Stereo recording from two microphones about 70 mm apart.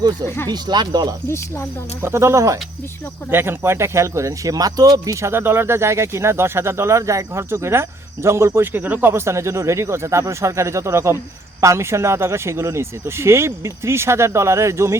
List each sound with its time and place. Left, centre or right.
0.3 s speech: left
0.5 s speech: right
2.0 s speech: right
3.2 s speech: right
8.6 s speech: right